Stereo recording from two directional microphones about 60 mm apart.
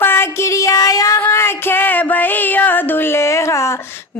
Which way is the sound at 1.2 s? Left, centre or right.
Left.